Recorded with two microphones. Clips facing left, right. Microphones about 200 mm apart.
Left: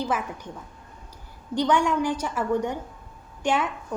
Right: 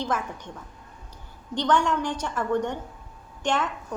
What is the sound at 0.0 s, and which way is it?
Speech, 10° left (ahead or behind).